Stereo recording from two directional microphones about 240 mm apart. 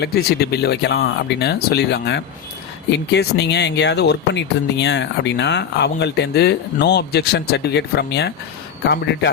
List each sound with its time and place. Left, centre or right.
0.0 s speech: left